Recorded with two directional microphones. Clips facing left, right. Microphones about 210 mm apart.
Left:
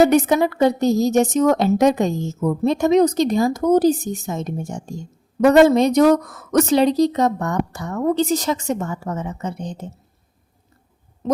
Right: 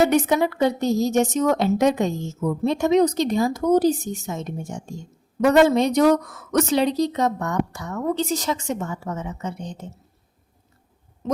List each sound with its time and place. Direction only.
0.1 s a woman's voice: 40° left (ahead or behind)